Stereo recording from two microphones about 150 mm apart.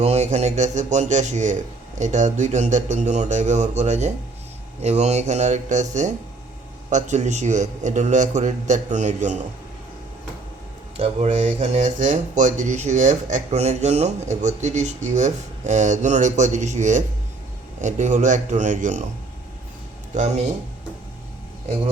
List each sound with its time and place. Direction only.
0.0 s speech: 45° right (ahead or behind)
10.9 s speech: 45° right (ahead or behind)
20.1 s speech: 50° right (ahead or behind)